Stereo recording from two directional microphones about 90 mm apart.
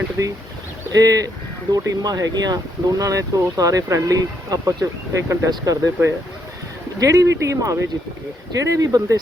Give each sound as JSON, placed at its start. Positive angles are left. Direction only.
{"t": 0.2, "sound": "speech", "side_deg": -35}
{"t": 7.0, "sound": "speech", "side_deg": -40}